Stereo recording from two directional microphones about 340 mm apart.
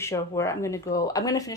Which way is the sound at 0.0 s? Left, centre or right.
Centre.